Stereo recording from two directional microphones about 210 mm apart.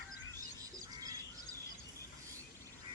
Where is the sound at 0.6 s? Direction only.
15° right (ahead or behind).